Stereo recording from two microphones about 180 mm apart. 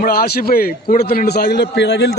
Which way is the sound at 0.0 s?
55° left (ahead or behind).